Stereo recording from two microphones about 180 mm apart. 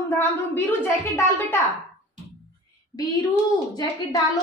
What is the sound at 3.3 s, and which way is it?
Speech, 20° left (ahead or behind).